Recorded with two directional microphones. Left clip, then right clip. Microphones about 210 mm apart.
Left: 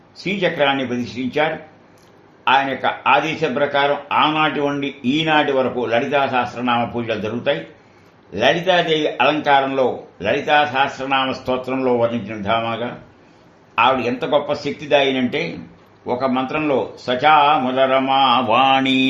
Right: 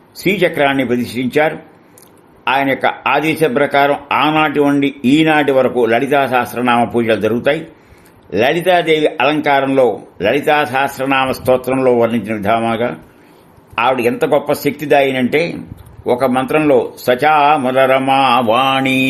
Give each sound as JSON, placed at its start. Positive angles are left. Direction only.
{"t": 0.2, "sound": "a man's voice", "side_deg": -60}